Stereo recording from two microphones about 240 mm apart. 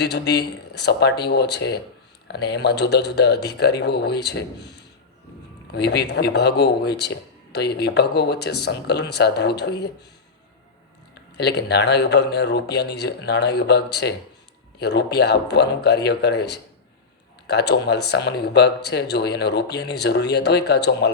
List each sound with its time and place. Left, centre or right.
0.0 s speech: left
11.3 s speech: left